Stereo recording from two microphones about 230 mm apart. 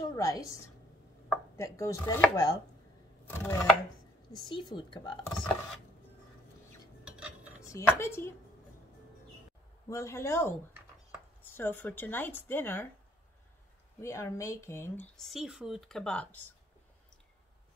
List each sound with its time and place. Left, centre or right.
0.0 s a woman's voice: centre
1.6 s speech: centre
4.5 s a woman's voice: centre
7.1 s cutlery: centre
7.6 s speech: centre
9.8 s speech: centre
14.0 s speech: centre